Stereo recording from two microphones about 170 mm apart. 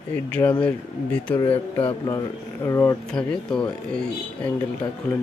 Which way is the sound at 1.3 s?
30° left (ahead or behind).